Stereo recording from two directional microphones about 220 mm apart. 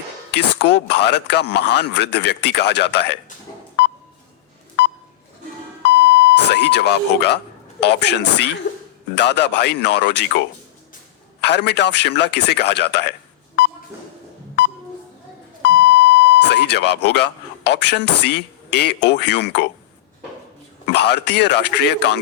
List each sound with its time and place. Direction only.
0.3 s speech: 50° left (ahead or behind)
5.9 s beep: 50° right (ahead or behind)
6.3 s speech: 50° left (ahead or behind)
11.3 s speech: 50° left (ahead or behind)
15.8 s speech: 50° left (ahead or behind)
20.9 s speech: 50° left (ahead or behind)